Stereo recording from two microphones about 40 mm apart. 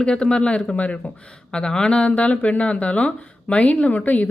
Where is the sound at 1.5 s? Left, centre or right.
Left.